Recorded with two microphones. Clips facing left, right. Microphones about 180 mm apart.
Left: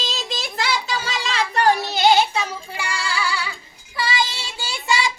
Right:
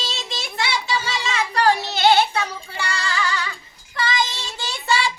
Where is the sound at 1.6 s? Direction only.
20° left (ahead or behind).